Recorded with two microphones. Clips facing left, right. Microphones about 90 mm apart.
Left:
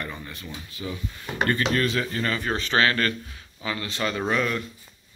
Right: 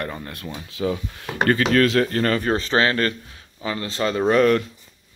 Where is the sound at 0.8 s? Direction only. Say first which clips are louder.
Right 10 dB; 90° right; by 4.7 s 50° right (ahead or behind).